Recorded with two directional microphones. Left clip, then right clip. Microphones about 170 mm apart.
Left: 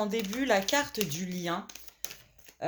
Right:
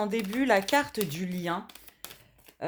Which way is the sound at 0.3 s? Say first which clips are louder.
Right 3 dB; 40° right (ahead or behind).